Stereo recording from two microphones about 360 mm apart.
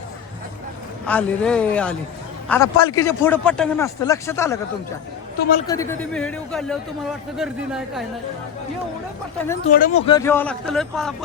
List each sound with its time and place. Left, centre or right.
1.0 s a man's voice: centre
5.6 s a man's voice: centre
9.6 s speech: left
10.1 s a man's voice: centre